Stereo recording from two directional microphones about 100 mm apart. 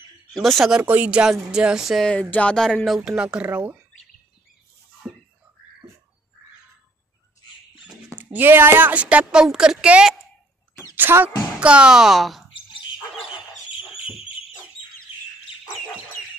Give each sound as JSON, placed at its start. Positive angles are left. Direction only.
{"t": 0.3, "sound": "speech", "side_deg": 0}
{"t": 0.8, "sound": "a woman's voice", "side_deg": -15}
{"t": 2.0, "sound": "speech", "side_deg": 10}
{"t": 3.1, "sound": "a woman's voice", "side_deg": -10}
{"t": 8.2, "sound": "a woman's voice", "side_deg": -20}
{"t": 11.0, "sound": "speech", "side_deg": -20}
{"t": 11.6, "sound": "a woman's voice", "side_deg": -10}